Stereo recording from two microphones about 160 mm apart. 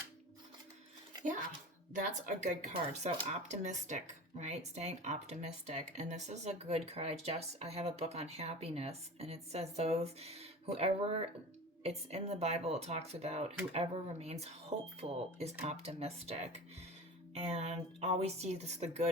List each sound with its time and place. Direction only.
2.0 s speech: 50° right (ahead or behind)